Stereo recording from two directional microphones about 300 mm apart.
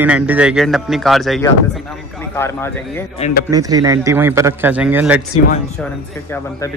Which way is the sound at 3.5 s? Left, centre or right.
Centre.